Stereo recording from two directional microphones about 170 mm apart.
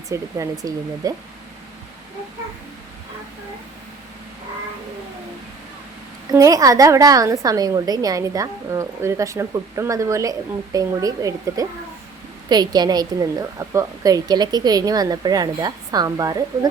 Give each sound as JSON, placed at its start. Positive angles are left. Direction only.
{"t": 0.1, "sound": "a woman's voice", "side_deg": -20}
{"t": 6.3, "sound": "a woman's voice", "side_deg": -20}